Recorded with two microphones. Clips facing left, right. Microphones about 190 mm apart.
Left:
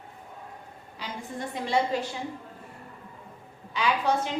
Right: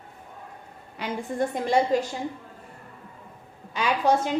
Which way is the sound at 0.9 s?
55° right (ahead or behind).